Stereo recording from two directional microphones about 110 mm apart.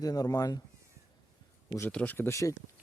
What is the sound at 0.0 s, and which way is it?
Speech, 35° left (ahead or behind).